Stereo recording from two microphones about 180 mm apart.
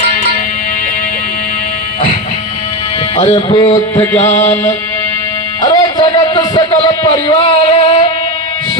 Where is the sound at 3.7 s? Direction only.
15° left (ahead or behind).